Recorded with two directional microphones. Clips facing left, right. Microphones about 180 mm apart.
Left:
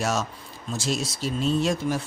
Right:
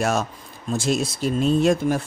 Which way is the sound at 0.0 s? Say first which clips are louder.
Right 4 dB; 55° right (ahead or behind).